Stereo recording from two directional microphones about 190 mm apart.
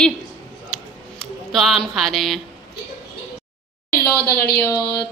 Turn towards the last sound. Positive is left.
turn(degrees=20)  # may be behind; listen again after turning